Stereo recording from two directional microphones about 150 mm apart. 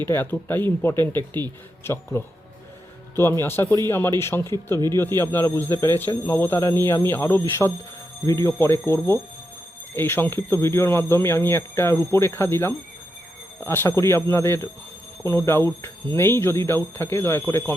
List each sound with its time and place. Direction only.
0.1 s speech: 15° left (ahead or behind)